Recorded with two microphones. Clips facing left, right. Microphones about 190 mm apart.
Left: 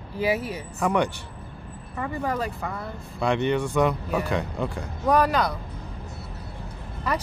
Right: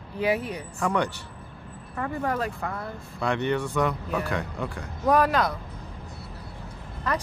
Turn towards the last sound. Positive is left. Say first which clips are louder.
# left 1 dB
turn(degrees=10)  # may be behind; listen again after turning